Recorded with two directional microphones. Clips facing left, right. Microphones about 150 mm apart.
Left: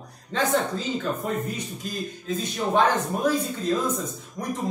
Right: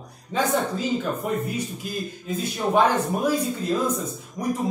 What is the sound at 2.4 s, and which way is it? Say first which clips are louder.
A man's voice: right 2 dB; 10° right (ahead or behind).